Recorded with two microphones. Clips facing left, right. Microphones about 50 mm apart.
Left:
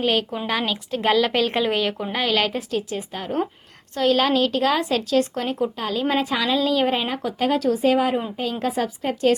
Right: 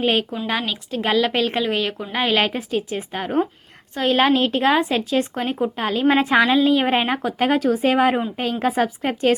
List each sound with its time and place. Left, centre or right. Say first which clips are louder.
0.0 s speech: right 2 dB; right
0.4 s a woman's voice: even; centre
2.2 s speech: right 3 dB; right
5.8 s a woman's voice: right 7 dB; right